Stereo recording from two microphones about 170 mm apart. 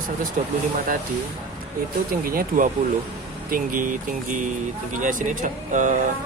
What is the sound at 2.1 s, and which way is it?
Speech, 60° right (ahead or behind).